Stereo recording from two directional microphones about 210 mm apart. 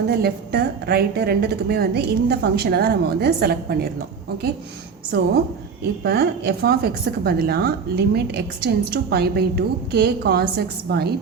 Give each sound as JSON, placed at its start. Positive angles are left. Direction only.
{"t": 0.1, "sound": "a woman's voice", "side_deg": -50}
{"t": 5.1, "sound": "a woman's voice", "side_deg": -50}